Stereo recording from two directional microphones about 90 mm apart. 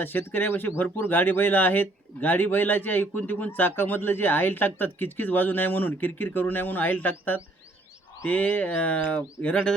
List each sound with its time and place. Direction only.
0.0 s speech: 25° left (ahead or behind)